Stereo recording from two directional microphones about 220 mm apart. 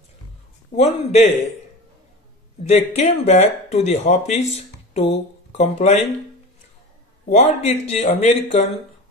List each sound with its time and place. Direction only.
0.7 s speech: 30° left (ahead or behind)
2.7 s speech: 30° left (ahead or behind)
7.3 s speech: 30° left (ahead or behind)